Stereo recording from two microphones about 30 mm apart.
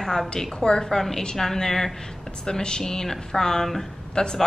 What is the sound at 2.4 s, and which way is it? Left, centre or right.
Speech, left.